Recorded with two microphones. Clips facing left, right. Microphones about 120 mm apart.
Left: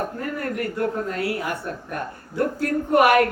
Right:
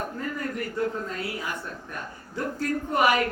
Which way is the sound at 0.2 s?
60° left (ahead or behind).